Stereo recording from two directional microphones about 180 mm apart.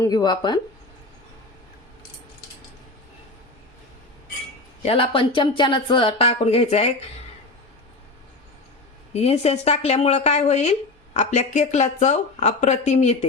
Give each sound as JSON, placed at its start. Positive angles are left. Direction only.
{"t": 0.0, "sound": "speech", "side_deg": 20}
{"t": 4.9, "sound": "a woman's voice", "side_deg": 30}
{"t": 9.1, "sound": "a woman's voice", "side_deg": 35}